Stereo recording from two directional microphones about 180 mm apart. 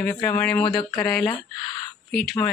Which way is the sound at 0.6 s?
25° left (ahead or behind).